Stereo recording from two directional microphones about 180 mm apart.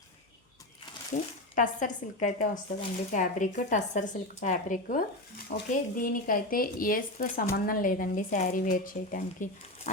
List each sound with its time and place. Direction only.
1.1 s speech: 45° left (ahead or behind)